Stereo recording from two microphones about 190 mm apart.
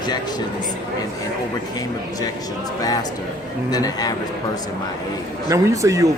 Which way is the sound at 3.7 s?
20° left (ahead or behind).